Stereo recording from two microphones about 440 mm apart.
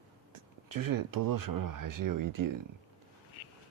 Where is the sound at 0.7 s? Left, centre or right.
Right.